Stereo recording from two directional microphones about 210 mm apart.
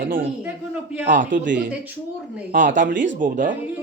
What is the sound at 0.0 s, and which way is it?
Speech, 40° right (ahead or behind).